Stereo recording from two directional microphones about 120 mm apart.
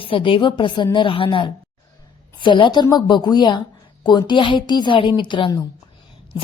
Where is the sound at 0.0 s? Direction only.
45° left (ahead or behind).